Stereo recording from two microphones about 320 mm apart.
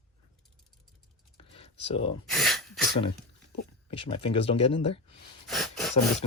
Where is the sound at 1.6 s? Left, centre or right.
Centre.